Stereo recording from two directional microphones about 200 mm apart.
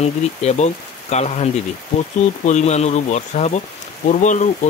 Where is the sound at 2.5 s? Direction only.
35° left (ahead or behind).